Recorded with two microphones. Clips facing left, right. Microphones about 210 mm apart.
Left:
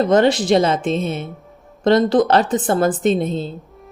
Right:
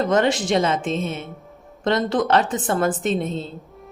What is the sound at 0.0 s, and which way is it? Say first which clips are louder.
A woman's voice: left 5 dB; 35° left (ahead or behind).